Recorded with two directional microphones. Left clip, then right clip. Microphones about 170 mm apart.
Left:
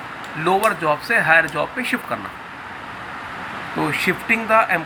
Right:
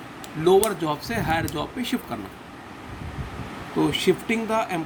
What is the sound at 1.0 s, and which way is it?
Speech, 40° right (ahead or behind).